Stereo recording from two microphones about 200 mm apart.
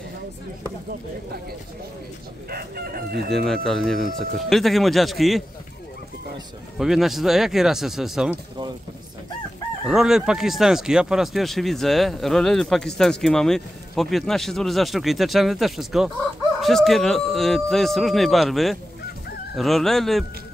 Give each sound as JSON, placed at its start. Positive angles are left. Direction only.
{"t": 2.5, "sound": "chicken", "side_deg": -50}
{"t": 3.3, "sound": "speech", "side_deg": 0}
{"t": 6.8, "sound": "speech", "side_deg": 0}
{"t": 9.8, "sound": "speech", "side_deg": -5}